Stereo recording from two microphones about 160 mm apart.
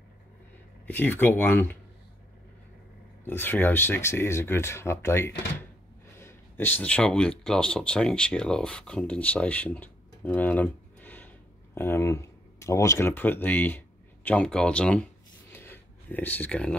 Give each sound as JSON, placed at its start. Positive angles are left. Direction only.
{"t": 0.8, "sound": "speech", "side_deg": 10}
{"t": 3.3, "sound": "speech", "side_deg": 10}
{"t": 15.5, "sound": "a sound", "side_deg": 15}